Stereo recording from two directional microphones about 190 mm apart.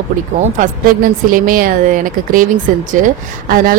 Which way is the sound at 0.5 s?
45° right (ahead or behind).